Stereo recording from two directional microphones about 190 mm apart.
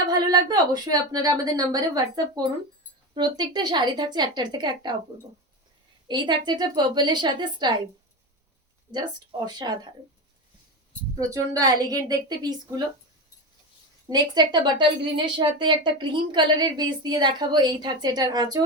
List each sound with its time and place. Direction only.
0.1 s speech: 20° right (ahead or behind)
6.1 s speech: 25° right (ahead or behind)
9.5 s speech: 20° right (ahead or behind)
11.2 s speech: 15° right (ahead or behind)
14.1 s speech: 20° right (ahead or behind)